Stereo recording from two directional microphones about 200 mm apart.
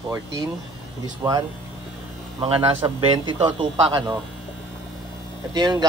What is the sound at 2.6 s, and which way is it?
A man's voice, 20° right (ahead or behind).